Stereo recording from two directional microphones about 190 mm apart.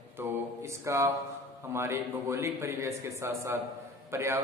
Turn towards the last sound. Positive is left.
turn(degrees=-15)  # may be behind; listen again after turning